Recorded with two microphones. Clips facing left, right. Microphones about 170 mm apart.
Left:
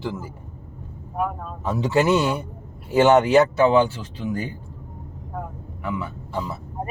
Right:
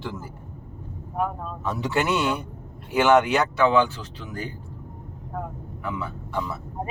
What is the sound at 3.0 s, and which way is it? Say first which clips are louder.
Speech: left 4 dB; 30° left (ahead or behind).